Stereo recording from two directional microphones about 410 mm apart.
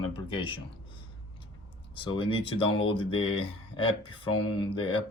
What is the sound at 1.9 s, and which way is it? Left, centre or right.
Speech, centre.